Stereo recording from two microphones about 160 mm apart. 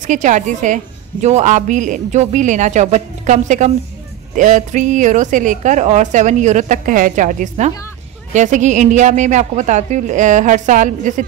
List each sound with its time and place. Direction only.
0.0 s a woman's voice: 50° right (ahead or behind)